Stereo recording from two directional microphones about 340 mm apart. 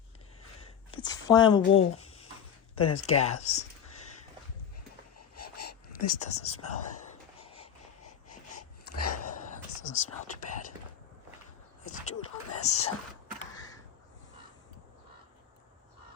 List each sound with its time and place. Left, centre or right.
0.9 s a woman's voice: centre
1.7 s a sound: left
2.7 s speech: centre
3.3 s speech: left
5.1 s a sound: left
6.1 s speech: left
7.3 s wheeze: centre
9.0 s a sound: left
9.8 s speech: left
11.9 s speech: left